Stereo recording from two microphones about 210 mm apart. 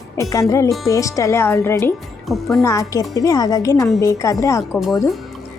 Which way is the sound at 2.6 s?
15° left (ahead or behind).